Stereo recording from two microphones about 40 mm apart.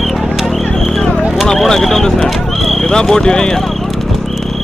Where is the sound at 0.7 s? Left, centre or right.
Centre.